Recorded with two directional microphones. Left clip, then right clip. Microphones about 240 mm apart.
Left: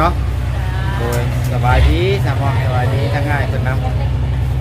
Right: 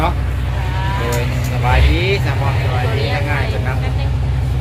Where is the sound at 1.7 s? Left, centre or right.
Left.